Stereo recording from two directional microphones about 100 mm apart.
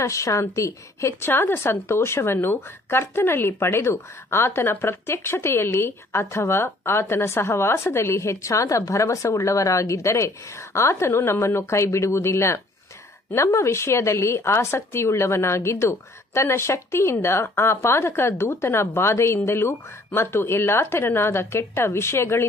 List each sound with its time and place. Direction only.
0.0 s a woman's voice: 30° left (ahead or behind)